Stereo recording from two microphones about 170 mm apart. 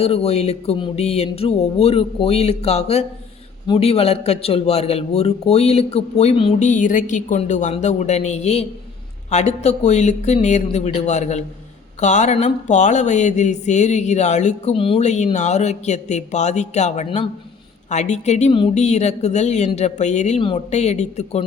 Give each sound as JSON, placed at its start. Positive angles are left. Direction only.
{"t": 0.0, "sound": "a man's voice", "side_deg": 35}